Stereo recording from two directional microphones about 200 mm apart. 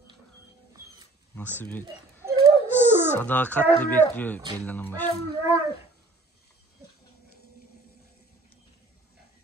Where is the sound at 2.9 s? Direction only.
10° right (ahead or behind).